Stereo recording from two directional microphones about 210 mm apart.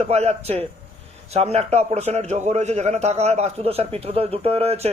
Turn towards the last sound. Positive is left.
turn(degrees=-30)  # may be behind; listen again after turning